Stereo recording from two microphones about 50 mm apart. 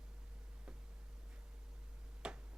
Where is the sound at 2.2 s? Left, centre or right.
Centre.